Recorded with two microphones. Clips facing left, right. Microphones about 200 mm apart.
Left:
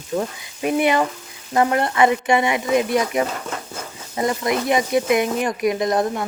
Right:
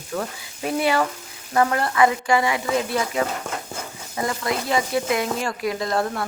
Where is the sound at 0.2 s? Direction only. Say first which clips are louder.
Left 2 dB; 20° left (ahead or behind).